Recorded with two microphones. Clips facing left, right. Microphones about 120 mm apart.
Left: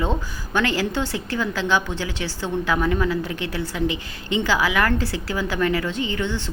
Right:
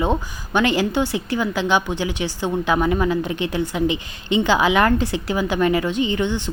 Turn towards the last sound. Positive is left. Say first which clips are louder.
# right 4 dB
turn(degrees=-20)  # may be behind; listen again after turning